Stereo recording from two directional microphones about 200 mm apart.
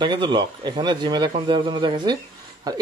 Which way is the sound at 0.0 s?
25° right (ahead or behind).